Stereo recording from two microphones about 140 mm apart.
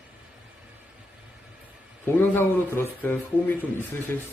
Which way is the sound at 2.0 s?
15° left (ahead or behind).